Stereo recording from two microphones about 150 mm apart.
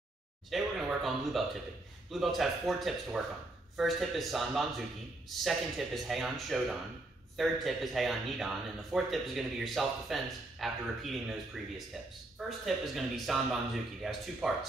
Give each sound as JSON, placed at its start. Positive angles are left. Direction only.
{"t": 0.5, "sound": "speech", "side_deg": 0}